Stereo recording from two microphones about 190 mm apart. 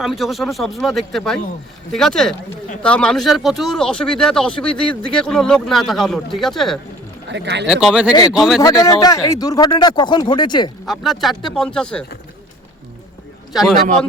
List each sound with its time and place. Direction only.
0.0 s speech: centre (ahead or behind)
7.3 s speech: 65° right (ahead or behind)
7.7 s speech: 5° right (ahead or behind)
8.8 s speech: 20° left (ahead or behind)
10.8 s speech: centre (ahead or behind)
13.5 s a man's voice: centre (ahead or behind)